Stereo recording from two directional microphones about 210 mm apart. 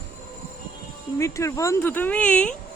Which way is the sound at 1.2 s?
15° left (ahead or behind).